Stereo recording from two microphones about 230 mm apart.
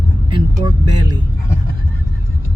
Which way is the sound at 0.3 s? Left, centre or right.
Centre.